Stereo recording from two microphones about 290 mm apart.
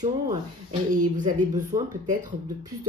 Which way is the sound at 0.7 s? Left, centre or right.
Right.